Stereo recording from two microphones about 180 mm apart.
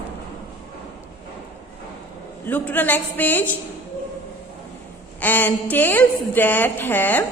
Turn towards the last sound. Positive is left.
turn(degrees=10)  # may be behind; listen again after turning